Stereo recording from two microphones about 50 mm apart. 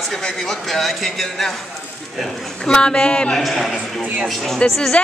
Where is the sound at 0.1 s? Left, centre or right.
Centre.